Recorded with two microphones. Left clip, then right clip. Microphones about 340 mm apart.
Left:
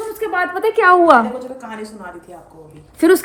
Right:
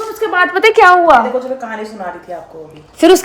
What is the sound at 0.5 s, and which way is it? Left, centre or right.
Speech, right.